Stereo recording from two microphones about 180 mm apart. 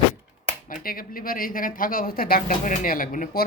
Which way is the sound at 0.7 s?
50° left (ahead or behind).